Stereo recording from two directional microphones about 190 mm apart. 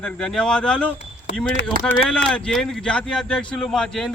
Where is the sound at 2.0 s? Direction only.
5° left (ahead or behind).